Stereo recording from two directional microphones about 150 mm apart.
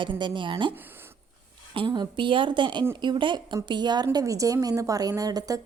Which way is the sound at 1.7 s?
30° right (ahead or behind).